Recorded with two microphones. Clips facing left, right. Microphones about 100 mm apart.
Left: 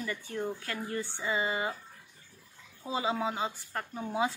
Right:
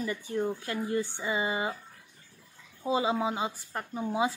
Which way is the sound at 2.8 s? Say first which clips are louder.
Right 4 dB; 20° right (ahead or behind).